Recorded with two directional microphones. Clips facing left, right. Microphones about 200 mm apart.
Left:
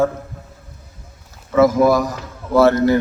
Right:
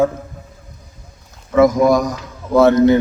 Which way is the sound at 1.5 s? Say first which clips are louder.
Right 1 dB; 5° left (ahead or behind).